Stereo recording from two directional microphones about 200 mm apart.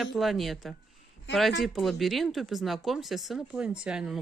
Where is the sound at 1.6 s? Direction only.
Centre (ahead or behind).